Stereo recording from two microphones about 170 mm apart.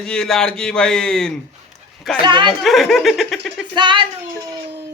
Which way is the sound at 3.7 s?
30° right (ahead or behind).